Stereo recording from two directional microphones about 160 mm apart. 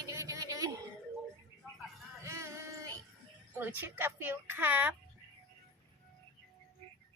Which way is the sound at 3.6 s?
10° right (ahead or behind).